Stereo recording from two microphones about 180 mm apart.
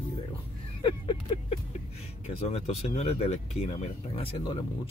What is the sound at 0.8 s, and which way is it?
Speech, 30° left (ahead or behind).